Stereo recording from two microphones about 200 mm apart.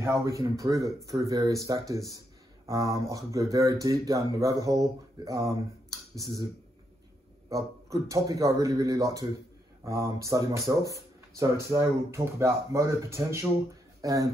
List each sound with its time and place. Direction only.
0.0 s speech: 15° right (ahead or behind)
7.4 s speech: 15° right (ahead or behind)